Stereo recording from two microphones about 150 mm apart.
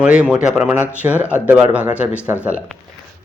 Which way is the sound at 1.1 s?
15° left (ahead or behind).